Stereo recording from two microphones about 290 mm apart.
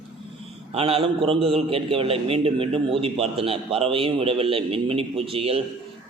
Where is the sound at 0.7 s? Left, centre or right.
Centre.